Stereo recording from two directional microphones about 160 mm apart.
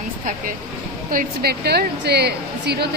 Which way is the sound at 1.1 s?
65° right (ahead or behind).